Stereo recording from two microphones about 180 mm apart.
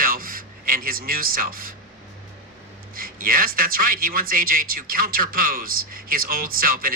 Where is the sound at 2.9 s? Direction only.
55° right (ahead or behind).